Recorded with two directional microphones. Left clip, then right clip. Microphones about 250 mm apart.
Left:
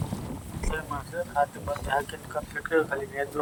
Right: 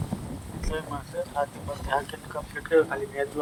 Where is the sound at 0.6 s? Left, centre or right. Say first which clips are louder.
Even; centre.